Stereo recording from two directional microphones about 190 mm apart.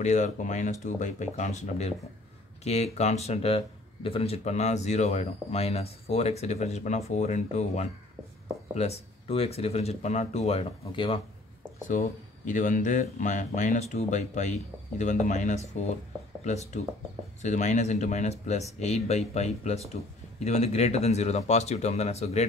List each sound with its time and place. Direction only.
0.0 s speech: 40° left (ahead or behind)
12.4 s speech: 40° left (ahead or behind)